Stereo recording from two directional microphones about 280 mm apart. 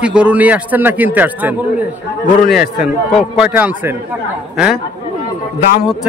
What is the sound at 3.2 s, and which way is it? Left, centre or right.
Speech, centre.